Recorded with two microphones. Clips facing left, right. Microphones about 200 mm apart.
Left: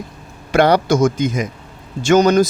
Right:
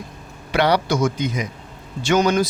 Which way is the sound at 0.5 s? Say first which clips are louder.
Left 5 dB; 45° left (ahead or behind).